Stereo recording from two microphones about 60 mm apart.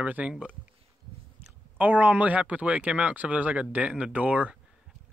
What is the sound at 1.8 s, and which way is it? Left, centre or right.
Speech, right.